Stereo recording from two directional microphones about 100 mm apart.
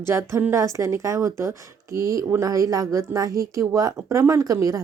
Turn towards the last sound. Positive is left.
turn(degrees=-35)  # may be behind; listen again after turning